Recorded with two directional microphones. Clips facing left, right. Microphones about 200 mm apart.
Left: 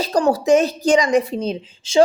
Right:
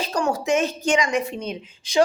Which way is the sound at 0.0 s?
35° left (ahead or behind).